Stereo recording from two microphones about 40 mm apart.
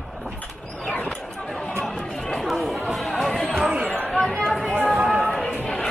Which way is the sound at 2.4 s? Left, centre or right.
Centre.